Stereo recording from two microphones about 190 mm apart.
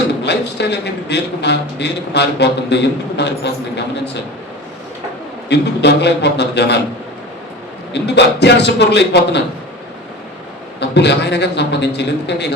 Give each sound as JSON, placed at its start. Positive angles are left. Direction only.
{"t": 0.3, "sound": "a man's voice", "side_deg": 65}
{"t": 5.5, "sound": "a man's voice", "side_deg": 65}
{"t": 7.9, "sound": "a man's voice", "side_deg": 65}
{"t": 10.8, "sound": "a man's voice", "side_deg": 65}